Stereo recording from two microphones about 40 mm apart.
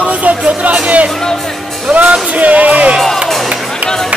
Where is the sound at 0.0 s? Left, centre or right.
Right.